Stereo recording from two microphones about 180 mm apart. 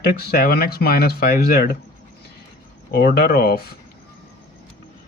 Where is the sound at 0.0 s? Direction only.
55° left (ahead or behind).